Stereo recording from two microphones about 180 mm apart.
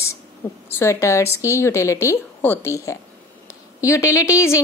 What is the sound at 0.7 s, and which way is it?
A woman's voice, 15° left (ahead or behind).